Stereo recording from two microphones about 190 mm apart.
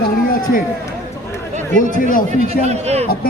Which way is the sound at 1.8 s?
45° left (ahead or behind).